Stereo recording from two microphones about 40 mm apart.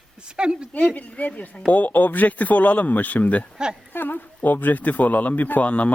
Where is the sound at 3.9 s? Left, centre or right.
Left.